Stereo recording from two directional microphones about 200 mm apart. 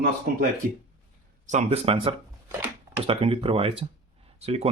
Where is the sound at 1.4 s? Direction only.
35° right (ahead or behind).